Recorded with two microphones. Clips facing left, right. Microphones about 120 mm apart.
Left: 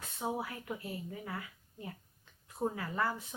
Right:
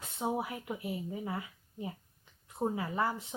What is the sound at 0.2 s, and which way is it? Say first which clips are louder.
Speech: right 3 dB; 20° right (ahead or behind).